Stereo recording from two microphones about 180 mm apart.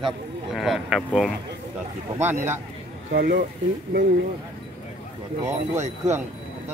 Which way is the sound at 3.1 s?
60° right (ahead or behind).